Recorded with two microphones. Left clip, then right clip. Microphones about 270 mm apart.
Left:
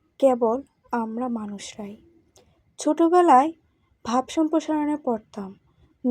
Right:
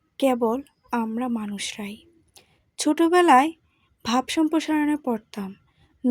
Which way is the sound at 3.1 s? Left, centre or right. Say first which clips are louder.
Even; right.